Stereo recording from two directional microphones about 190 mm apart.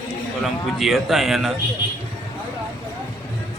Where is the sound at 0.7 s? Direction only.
Centre (ahead or behind).